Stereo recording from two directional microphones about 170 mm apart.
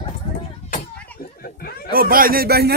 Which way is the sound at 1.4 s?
65° left (ahead or behind).